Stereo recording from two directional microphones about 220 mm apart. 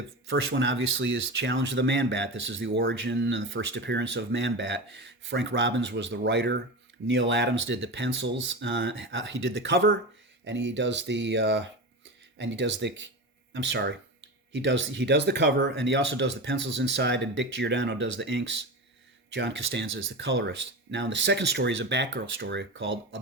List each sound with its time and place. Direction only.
0.3 s speech: 55° right (ahead or behind)